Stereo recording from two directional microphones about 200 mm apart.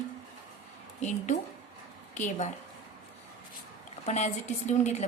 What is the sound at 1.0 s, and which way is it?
A woman's voice, 35° left (ahead or behind).